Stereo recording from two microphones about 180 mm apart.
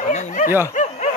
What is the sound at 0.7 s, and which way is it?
Snicker, 40° left (ahead or behind).